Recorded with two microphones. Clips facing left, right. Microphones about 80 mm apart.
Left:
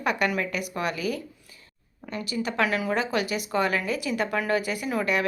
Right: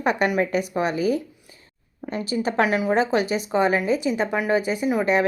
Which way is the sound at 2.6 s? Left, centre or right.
Right.